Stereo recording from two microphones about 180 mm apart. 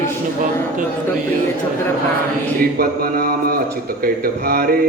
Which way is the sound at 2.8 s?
55° right (ahead or behind).